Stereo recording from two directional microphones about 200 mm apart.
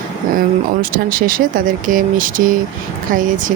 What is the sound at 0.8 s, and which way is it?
Speech, 45° right (ahead or behind).